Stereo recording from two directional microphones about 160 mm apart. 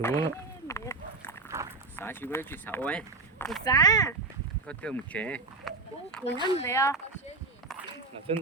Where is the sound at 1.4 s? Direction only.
20° right (ahead or behind).